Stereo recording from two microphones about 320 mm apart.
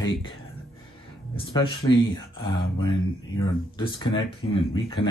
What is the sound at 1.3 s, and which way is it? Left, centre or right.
Speech, centre.